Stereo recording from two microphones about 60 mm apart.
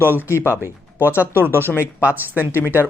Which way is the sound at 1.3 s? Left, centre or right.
Right.